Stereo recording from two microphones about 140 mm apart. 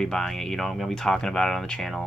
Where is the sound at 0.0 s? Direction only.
5° left (ahead or behind).